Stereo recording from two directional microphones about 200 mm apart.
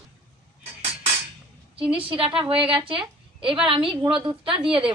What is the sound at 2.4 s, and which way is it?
A woman's voice, 25° right (ahead or behind).